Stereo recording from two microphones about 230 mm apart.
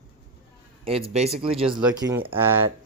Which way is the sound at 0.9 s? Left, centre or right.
Right.